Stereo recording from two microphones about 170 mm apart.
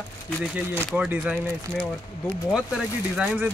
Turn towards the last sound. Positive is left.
turn(degrees=-5)  # may be behind; listen again after turning